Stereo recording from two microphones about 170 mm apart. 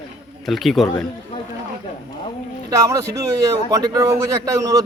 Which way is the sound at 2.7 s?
20° right (ahead or behind).